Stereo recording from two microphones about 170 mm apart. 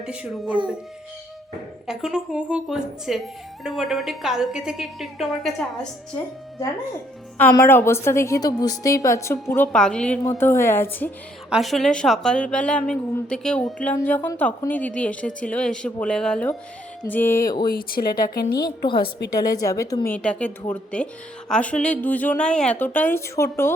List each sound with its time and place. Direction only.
0.0 s speech: 5° right (ahead or behind)
1.9 s speech: 5° right (ahead or behind)
7.5 s a woman's voice: 15° left (ahead or behind)
11.4 s a woman's voice: centre (ahead or behind); by 17.7 s 20° left (ahead or behind)
17.7 s speech: 60° left (ahead or behind)
18.6 s a woman's voice: 25° left (ahead or behind)
20.1 s a woman's voice: 10° left (ahead or behind)